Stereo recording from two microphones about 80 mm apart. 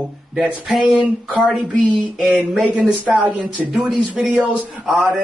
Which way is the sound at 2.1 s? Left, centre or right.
Centre.